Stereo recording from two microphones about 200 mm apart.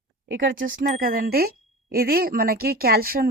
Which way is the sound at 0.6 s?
45° right (ahead or behind).